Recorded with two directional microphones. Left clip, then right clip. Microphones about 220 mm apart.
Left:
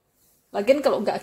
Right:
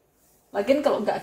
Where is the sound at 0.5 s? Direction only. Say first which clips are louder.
Left 2 dB; 55° left (ahead or behind).